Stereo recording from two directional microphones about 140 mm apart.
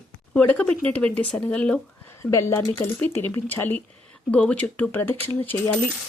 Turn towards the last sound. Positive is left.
turn(degrees=15)  # may be behind; listen again after turning